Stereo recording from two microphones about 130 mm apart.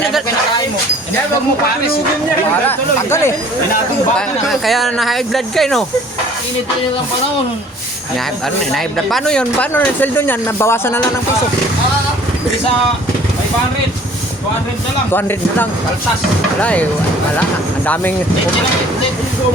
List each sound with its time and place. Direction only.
2.6 s speech: 20° left (ahead or behind)
4.4 s speech: centre (ahead or behind)
8.7 s speech: centre (ahead or behind); by 11.0 s 20° left (ahead or behind)
15.1 s speech: 15° left (ahead or behind)
17.8 s speech: 10° left (ahead or behind)